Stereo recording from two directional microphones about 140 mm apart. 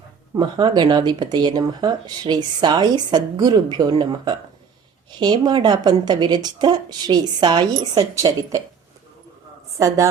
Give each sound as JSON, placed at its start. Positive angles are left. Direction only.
{"t": 0.3, "sound": "speech", "side_deg": -30}
{"t": 9.7, "sound": "a woman's voice", "side_deg": -25}